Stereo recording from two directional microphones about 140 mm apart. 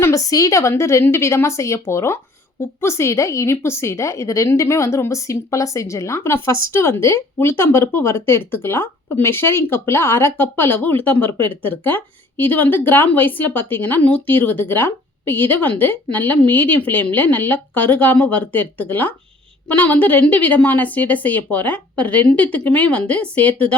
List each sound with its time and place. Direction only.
0.0 s a woman's voice: 25° left (ahead or behind)